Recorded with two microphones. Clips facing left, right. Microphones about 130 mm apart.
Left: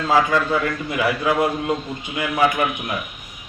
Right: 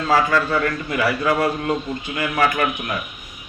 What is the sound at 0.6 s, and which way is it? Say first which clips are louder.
Speech: right 1 dB; 15° left (ahead or behind).